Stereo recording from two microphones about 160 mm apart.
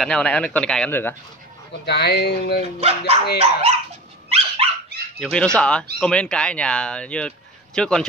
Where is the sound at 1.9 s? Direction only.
90° left.